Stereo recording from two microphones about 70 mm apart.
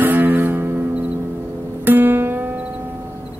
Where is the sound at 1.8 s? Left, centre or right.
Right.